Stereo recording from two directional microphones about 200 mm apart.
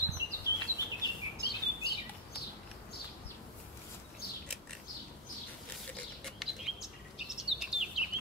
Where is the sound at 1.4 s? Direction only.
55° left (ahead or behind).